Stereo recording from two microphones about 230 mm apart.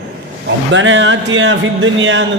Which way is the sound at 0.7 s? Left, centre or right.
Right.